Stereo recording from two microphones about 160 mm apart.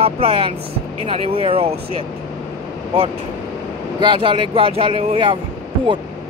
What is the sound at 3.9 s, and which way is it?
Speech, 30° right (ahead or behind).